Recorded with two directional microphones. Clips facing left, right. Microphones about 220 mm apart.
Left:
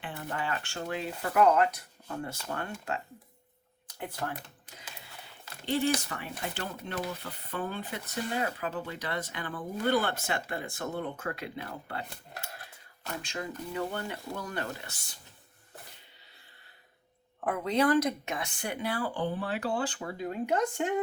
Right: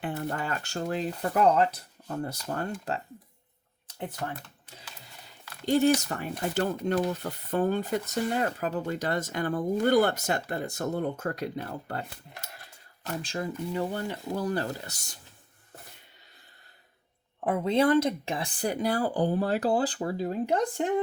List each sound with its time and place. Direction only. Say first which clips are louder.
0.0 s speech: right 4 dB; 45° right (ahead or behind)
3.8 s a sound: right 3 dB; 25° right (ahead or behind)
5.6 s speech: right 6 dB; 45° right (ahead or behind)
13.2 s speech: right 6 dB; 35° right (ahead or behind)
17.4 s speech: right 3 dB; 25° right (ahead or behind)